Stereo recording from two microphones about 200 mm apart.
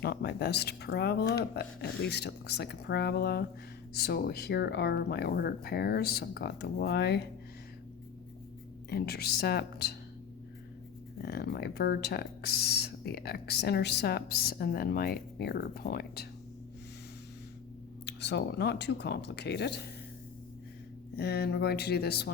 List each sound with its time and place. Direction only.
0.0 s speech: 55° left (ahead or behind)
8.9 s speech: 50° left (ahead or behind)
11.2 s speech: 55° left (ahead or behind)
18.0 s speech: 60° left (ahead or behind)
21.2 s speech: 55° left (ahead or behind)